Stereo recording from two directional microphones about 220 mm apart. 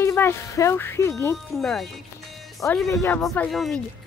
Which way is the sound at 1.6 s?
Centre (ahead or behind).